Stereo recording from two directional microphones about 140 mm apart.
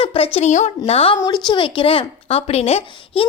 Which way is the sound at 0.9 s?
40° left (ahead or behind).